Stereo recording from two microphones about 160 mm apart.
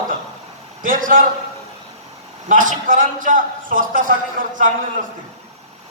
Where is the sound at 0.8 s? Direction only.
55° right (ahead or behind).